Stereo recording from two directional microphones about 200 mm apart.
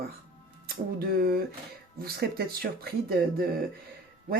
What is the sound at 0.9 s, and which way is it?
Speech, 50° right (ahead or behind).